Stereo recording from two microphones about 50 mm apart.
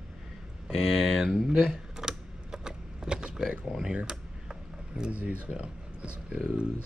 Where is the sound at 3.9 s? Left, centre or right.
Centre.